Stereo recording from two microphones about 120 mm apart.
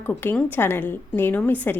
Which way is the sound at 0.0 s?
15° left (ahead or behind).